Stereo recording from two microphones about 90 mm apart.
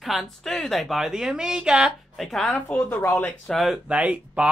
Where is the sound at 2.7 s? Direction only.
15° left (ahead or behind).